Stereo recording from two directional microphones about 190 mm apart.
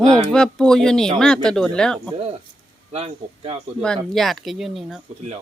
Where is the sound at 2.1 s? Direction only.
30° right (ahead or behind).